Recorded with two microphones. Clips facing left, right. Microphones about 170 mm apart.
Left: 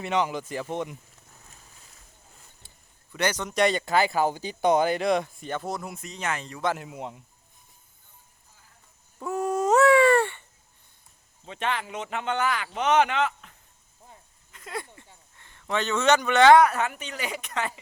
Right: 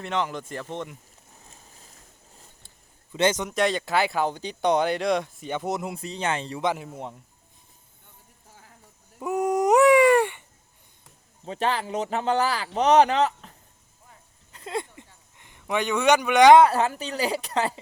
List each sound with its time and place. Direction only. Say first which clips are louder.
0.0 s speech: left 2 dB; 10° left (ahead or behind)
3.1 s speech: right 5 dB; 20° right (ahead or behind)
3.5 s speech: left 1 dB; centre (ahead or behind)
5.5 s speech: right 3 dB; 15° right (ahead or behind)
9.1 s a sound: right 3 dB; 15° right (ahead or behind)
11.4 s a man's voice: right 4 dB; 35° right (ahead or behind)
14.5 s a sound: right 5 dB; 25° right (ahead or behind)
16.6 s a man's voice: right 3 dB; 30° right (ahead or behind)